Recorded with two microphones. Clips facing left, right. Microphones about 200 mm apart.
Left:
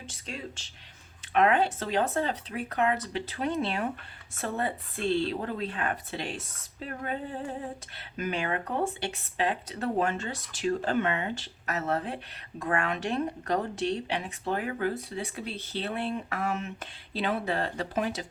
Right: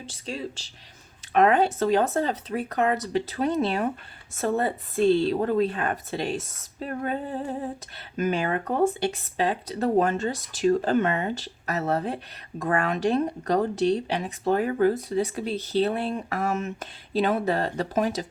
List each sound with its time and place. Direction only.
0.0 s speech: 35° right (ahead or behind)